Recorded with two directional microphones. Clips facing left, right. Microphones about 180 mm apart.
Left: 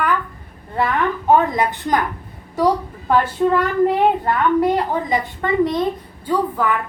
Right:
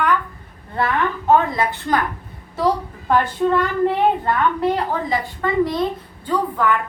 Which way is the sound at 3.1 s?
5° left (ahead or behind).